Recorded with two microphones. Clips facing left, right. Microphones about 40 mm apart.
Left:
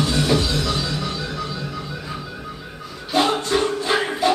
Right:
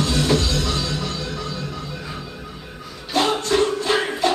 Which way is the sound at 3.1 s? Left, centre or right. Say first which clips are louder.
Even; centre.